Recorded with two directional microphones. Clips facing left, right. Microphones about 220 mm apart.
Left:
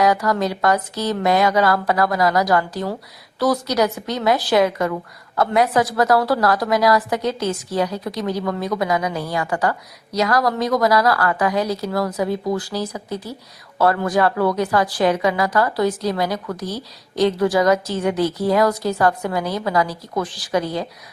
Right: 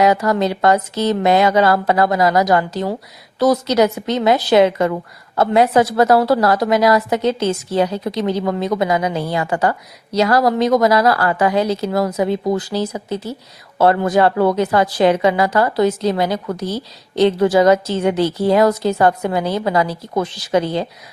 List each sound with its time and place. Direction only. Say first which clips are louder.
0.0 s a woman's voice: right 3 dB; 25° right (ahead or behind)